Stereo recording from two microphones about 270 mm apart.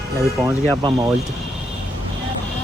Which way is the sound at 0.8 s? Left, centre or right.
Centre.